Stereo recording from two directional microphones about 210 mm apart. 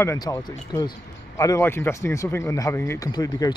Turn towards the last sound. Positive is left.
turn(degrees=20)  # may be behind; listen again after turning